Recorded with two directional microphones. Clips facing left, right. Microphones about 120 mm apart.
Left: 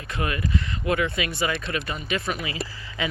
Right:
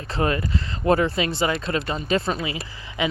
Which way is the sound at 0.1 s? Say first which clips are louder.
Right 4 dB; 30° right (ahead or behind).